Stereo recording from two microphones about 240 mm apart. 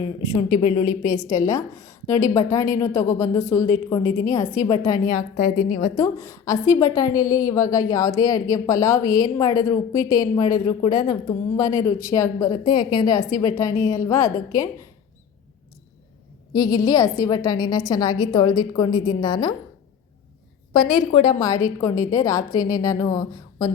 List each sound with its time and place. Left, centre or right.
0.6 s a woman's voice: left
1.3 s a woman's voice: centre
5.1 s a woman's voice: left
6.0 s a woman's voice: centre
16.5 s a woman's voice: centre
20.8 s a woman's voice: left
21.2 s a woman's voice: centre